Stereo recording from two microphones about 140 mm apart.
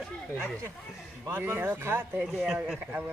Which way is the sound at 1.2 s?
15° right (ahead or behind).